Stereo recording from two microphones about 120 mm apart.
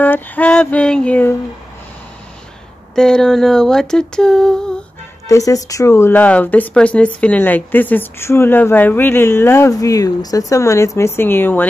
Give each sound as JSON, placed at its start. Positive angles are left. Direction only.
{"t": 0.0, "sound": "female singing", "side_deg": 15}
{"t": 3.0, "sound": "a sound", "side_deg": 5}
{"t": 5.3, "sound": "speech", "side_deg": 30}